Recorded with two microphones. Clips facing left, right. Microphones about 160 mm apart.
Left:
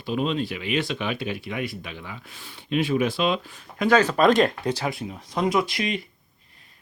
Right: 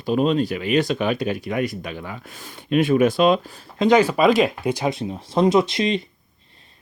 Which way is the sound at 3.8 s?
15° right (ahead or behind).